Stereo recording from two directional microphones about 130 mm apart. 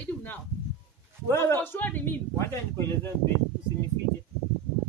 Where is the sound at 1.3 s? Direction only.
15° left (ahead or behind).